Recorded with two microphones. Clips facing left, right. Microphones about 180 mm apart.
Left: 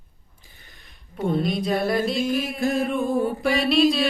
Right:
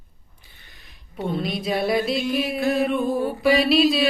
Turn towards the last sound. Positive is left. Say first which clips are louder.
# right 1 dB
turn(degrees=-5)  # may be behind; listen again after turning